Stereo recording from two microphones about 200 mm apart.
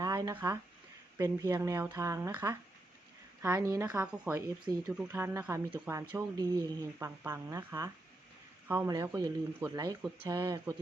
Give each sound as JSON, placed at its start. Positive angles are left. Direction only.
{"t": 0.0, "sound": "speech", "side_deg": -20}
{"t": 4.1, "sound": "speech", "side_deg": -5}
{"t": 4.4, "sound": "speech", "side_deg": -20}
{"t": 4.9, "sound": "speech", "side_deg": -10}